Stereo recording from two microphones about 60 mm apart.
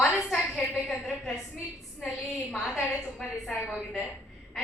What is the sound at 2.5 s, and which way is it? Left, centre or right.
A woman's voice, centre.